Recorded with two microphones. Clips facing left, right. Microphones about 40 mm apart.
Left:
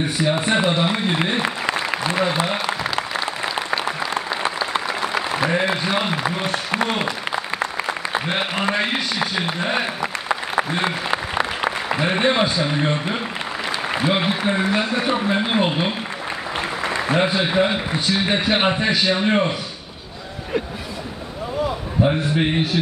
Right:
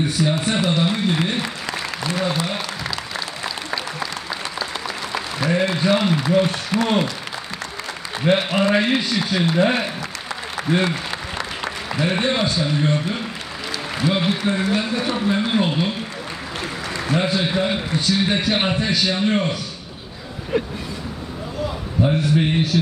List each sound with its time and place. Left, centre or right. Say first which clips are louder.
0.2 s a man's voice: left 3 dB; left
1.4 s applause: left 4 dB; left
5.9 s a man's voice: right 3 dB; left
8.4 s a man's voice: right 3 dB; left
10.8 s a man's voice: left 1 dB; left
16.8 s applause: left 2 dB; left
17.5 s a man's voice: left 2 dB; centre
20.5 s vehicle: right 2 dB; centre
22.0 s a man's voice: right 1 dB; left